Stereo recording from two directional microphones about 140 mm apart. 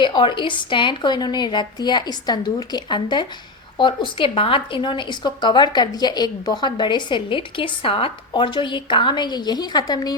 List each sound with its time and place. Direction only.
0.0 s speech: 35° left (ahead or behind)